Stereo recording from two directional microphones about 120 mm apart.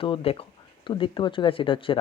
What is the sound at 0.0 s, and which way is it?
Speech, 50° left (ahead or behind).